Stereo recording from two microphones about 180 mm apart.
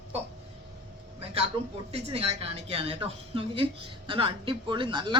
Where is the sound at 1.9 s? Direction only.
35° right (ahead or behind).